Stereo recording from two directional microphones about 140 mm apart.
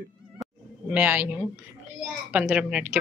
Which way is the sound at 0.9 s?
10° right (ahead or behind).